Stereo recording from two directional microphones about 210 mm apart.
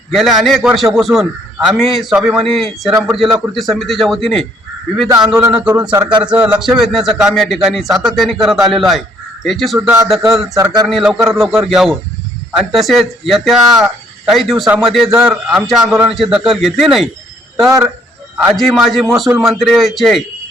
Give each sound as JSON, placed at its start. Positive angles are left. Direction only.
{"t": 0.1, "sound": "speech", "side_deg": 0}
{"t": 5.0, "sound": "a man's voice", "side_deg": -15}
{"t": 6.2, "sound": "speech", "side_deg": -5}
{"t": 18.5, "sound": "speech", "side_deg": 0}